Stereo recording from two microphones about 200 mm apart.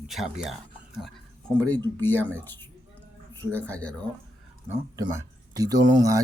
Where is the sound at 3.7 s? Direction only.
5° left (ahead or behind).